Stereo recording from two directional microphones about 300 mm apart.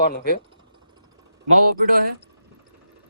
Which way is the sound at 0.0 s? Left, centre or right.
Left.